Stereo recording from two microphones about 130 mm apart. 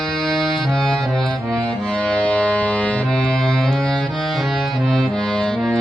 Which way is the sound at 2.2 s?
10° left (ahead or behind).